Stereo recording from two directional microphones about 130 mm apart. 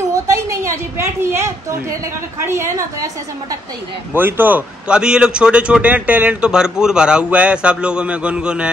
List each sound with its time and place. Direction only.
0.1 s a sound: 20° right (ahead or behind)
2.4 s a woman's voice: 20° right (ahead or behind)
4.1 s a man's voice: 15° right (ahead or behind)